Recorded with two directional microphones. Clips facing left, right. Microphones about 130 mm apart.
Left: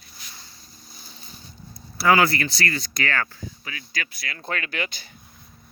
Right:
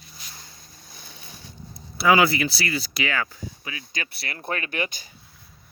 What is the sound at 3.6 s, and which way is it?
Speech, 25° right (ahead or behind).